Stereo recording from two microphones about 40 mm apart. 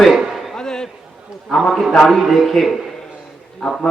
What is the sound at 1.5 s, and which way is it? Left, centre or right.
A man's voice, centre.